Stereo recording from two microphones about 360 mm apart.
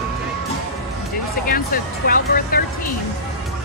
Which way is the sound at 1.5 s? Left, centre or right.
Left.